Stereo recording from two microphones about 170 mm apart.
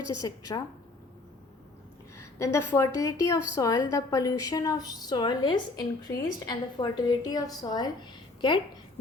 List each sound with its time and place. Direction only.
0.2 s a woman's voice: 20° left (ahead or behind)
2.1 s a woman's voice: 15° left (ahead or behind)